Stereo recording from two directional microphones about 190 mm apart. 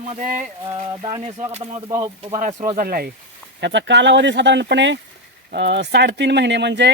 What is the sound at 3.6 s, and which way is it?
Speech, 70° right (ahead or behind).